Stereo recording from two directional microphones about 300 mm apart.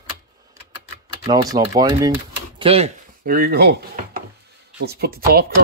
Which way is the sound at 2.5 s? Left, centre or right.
Centre.